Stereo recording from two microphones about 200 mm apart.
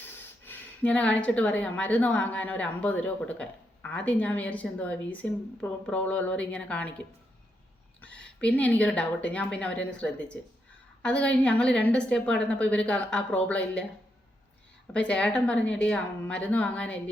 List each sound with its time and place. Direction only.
0.4 s a woman's voice: 5° left (ahead or behind)
8.0 s a woman's voice: 5° left (ahead or behind)
14.9 s a woman's voice: 5° left (ahead or behind)